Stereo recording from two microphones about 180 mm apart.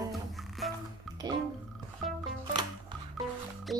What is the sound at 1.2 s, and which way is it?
Music, 25° right (ahead or behind).